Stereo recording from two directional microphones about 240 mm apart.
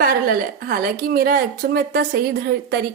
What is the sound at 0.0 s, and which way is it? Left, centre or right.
A woman's voice, right.